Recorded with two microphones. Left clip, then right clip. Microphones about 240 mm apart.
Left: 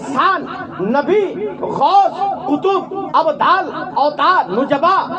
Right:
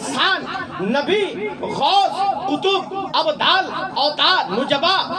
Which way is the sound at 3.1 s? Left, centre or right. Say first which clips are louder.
Left 4 dB; right.